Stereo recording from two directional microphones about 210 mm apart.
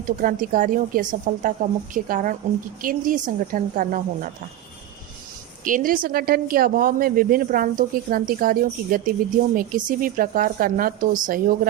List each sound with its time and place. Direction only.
0.0 s a woman's voice: 40° right (ahead or behind)
5.6 s a woman's voice: 40° right (ahead or behind)